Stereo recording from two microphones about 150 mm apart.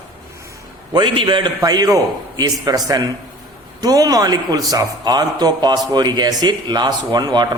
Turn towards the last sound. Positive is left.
turn(degrees=-25)  # may be behind; listen again after turning